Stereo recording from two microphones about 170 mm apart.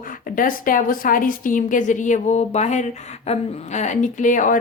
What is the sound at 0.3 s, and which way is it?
Speech, 55° left (ahead or behind).